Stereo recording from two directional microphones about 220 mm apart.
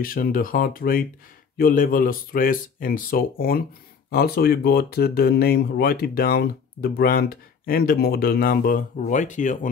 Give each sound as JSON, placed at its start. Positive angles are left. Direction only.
{"t": 0.0, "sound": "speech", "side_deg": 40}